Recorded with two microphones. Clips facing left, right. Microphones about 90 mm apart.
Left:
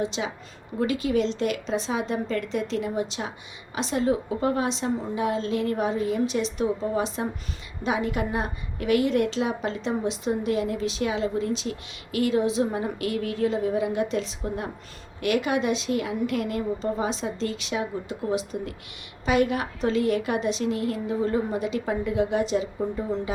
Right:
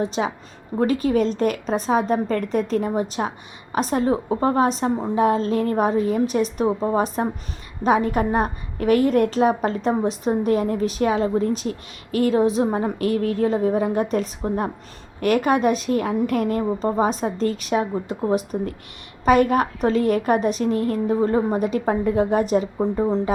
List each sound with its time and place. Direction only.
0.0 s a woman's voice: 40° right (ahead or behind)